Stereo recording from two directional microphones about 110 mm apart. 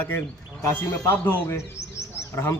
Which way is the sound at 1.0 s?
20° left (ahead or behind).